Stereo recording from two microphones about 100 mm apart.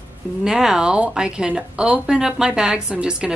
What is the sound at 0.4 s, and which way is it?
Speech, 5° right (ahead or behind).